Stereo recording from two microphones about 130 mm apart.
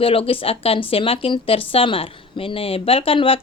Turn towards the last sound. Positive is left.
turn(degrees=45)  # may be behind; listen again after turning